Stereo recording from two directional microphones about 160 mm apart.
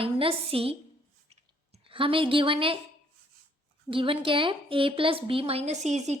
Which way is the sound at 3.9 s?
35° right (ahead or behind).